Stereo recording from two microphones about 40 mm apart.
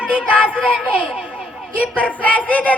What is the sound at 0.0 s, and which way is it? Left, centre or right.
Child singing, right.